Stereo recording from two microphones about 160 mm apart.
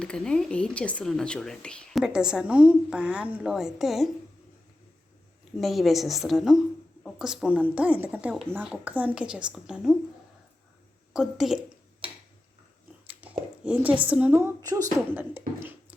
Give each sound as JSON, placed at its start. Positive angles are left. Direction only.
{"t": 0.0, "sound": "speech", "side_deg": 5}
{"t": 5.5, "sound": "speech", "side_deg": 0}
{"t": 11.1, "sound": "speech", "side_deg": 0}
{"t": 13.1, "sound": "a sound", "side_deg": -10}
{"t": 14.1, "sound": "a woman's voice", "side_deg": -10}